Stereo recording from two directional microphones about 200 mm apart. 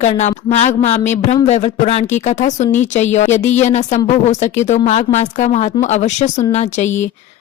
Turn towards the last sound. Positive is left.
turn(degrees=35)  # may be behind; listen again after turning